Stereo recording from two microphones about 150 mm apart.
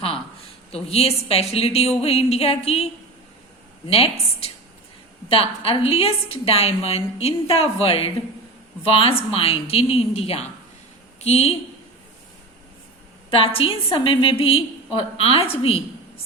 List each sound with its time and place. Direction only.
0.7 s a woman's voice: 40° left (ahead or behind)
13.3 s a woman's voice: 40° left (ahead or behind)